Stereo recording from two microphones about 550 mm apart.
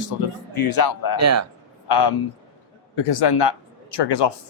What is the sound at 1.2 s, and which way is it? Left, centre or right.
Speech, right.